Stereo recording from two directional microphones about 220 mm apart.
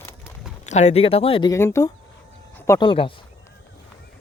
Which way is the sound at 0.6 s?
30° left (ahead or behind).